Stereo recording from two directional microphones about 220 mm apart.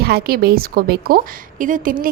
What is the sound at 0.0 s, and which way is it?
A woman's voice, 45° right (ahead or behind).